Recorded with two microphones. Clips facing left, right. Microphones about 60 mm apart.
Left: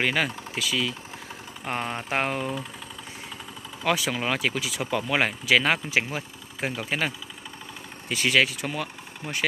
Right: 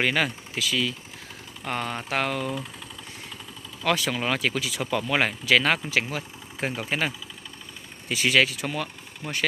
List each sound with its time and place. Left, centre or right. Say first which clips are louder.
0.0 s speech: right 1 dB; centre
1.6 s speech: even; centre
3.8 s speech: even; centre
6.7 s speech: even; centre
8.1 s speech: right 1 dB; centre